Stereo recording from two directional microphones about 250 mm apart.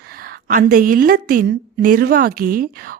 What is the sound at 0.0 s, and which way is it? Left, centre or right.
A woman's voice, right.